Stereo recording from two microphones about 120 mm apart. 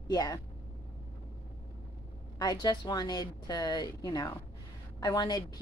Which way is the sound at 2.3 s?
35° left (ahead or behind).